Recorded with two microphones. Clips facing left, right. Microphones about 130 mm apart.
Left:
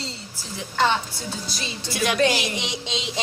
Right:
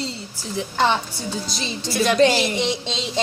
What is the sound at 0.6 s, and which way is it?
Speech, 20° right (ahead or behind).